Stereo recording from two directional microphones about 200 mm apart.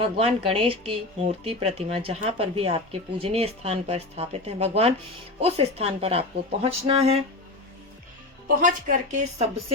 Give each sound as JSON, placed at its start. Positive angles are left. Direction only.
{"t": 0.0, "sound": "speech", "side_deg": -30}
{"t": 8.4, "sound": "a woman's voice", "side_deg": -40}